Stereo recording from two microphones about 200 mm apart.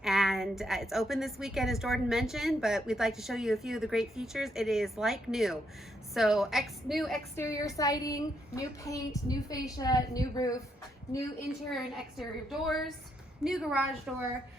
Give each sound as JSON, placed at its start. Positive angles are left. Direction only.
{"t": 0.0, "sound": "a woman's voice", "side_deg": 0}
{"t": 7.3, "sound": "a woman's voice", "side_deg": 15}
{"t": 11.7, "sound": "a woman's voice", "side_deg": 0}